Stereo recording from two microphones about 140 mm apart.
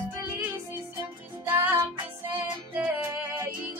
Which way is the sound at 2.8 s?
15° right (ahead or behind).